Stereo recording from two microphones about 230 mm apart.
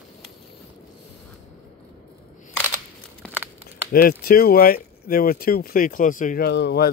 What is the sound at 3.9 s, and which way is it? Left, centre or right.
Speech, left.